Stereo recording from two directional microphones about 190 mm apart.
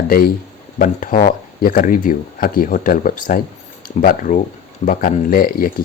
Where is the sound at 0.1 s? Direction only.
50° left (ahead or behind).